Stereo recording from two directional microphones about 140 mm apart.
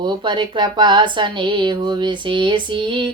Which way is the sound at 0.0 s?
35° right (ahead or behind).